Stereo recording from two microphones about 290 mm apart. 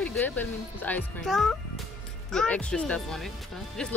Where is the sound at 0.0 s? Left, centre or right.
Centre.